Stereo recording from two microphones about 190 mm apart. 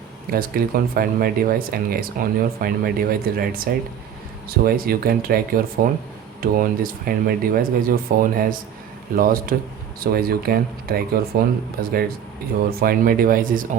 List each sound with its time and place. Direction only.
0.3 s speech: 50° right (ahead or behind)